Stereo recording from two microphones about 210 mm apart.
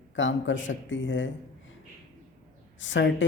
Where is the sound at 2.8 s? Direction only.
60° left (ahead or behind).